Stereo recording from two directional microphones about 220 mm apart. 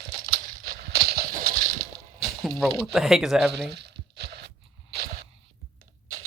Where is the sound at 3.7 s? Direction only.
50° right (ahead or behind).